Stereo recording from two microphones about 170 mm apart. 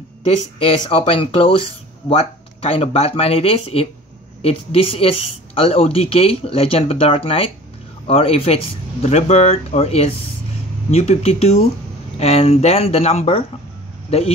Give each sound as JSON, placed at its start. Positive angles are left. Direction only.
{"t": 0.2, "sound": "speech", "side_deg": 35}